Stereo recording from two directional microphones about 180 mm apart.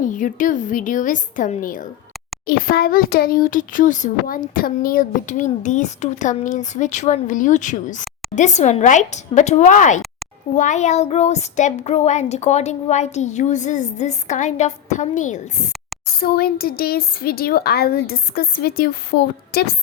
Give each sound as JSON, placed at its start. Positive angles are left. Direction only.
{"t": 0.0, "sound": "a child's voice", "side_deg": 45}
{"t": 16.2, "sound": "a woman's voice", "side_deg": 55}